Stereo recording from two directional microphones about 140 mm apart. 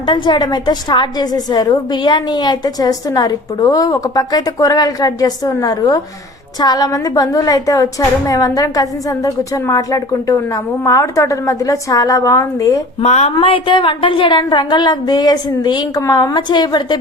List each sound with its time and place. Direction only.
0.0 s a woman's voice: 35° left (ahead or behind)
13.0 s a woman's voice: 50° left (ahead or behind); by 17.0 s 30° left (ahead or behind)